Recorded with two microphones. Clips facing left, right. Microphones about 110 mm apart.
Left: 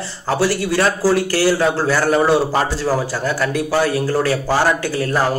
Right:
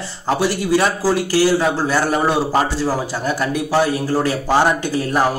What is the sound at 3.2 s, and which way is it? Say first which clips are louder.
A man's voice: left 1 dB; 20° right (ahead or behind).